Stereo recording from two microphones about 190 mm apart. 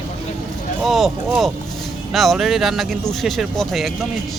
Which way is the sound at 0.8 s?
Centre (ahead or behind).